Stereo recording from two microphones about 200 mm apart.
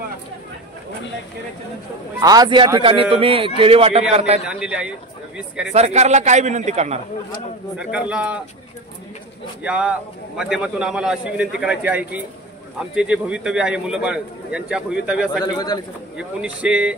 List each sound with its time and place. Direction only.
2.2 s a man's voice: 20° right (ahead or behind)
4.5 s a man's voice: 5° right (ahead or behind)
5.7 s a man's voice: 35° right (ahead or behind)
8.1 s speech: 5° right (ahead or behind)
9.6 s a man's voice: 5° right (ahead or behind)
15.4 s a man's voice: 20° left (ahead or behind)
16.2 s a man's voice: 5° right (ahead or behind)